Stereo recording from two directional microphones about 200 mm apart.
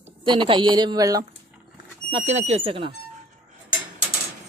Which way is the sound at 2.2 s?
35° right (ahead or behind).